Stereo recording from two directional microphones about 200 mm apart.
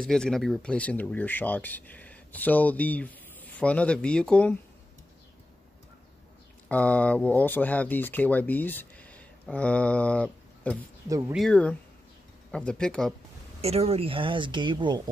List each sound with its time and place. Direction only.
0.0 s speech: 5° left (ahead or behind)
6.7 s speech: 5° left (ahead or behind)
11.1 s speech: 15° right (ahead or behind)
11.3 s speech: 5° left (ahead or behind)
13.6 s speech: 30° right (ahead or behind)